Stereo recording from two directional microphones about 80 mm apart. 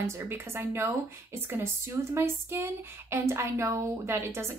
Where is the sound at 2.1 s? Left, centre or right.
Right.